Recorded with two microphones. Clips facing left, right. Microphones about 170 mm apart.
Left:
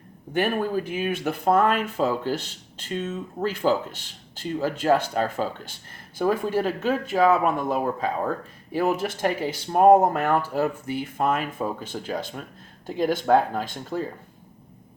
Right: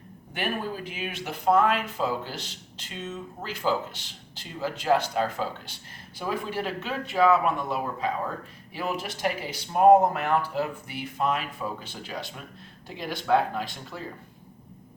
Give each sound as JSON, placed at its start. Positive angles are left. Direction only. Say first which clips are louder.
{"t": 0.3, "sound": "speech", "louder": "left 7 dB", "side_deg": 45}